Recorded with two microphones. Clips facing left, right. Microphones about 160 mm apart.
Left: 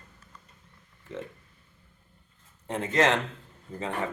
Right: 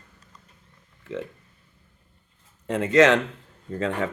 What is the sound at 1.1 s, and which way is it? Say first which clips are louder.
Speech: right 6 dB; 70° right (ahead or behind).